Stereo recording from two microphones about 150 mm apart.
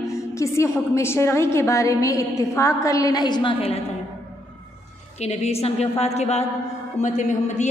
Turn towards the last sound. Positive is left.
turn(degrees=50)  # may be behind; listen again after turning